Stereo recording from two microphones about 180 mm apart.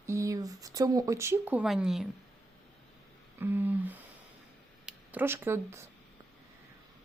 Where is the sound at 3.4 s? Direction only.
10° right (ahead or behind).